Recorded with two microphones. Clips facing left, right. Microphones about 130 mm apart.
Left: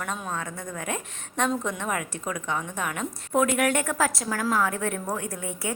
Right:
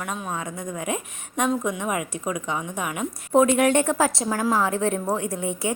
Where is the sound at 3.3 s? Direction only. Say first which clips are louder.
Right 5 dB; 25° right (ahead or behind).